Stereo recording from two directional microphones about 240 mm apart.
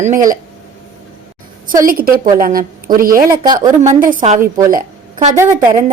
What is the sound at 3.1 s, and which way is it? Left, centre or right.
Speech, centre.